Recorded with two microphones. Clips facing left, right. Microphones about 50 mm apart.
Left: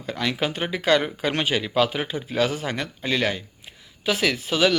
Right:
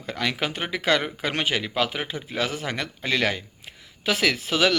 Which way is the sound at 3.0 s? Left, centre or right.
Right.